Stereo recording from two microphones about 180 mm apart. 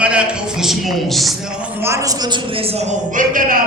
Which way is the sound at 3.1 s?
50° right (ahead or behind).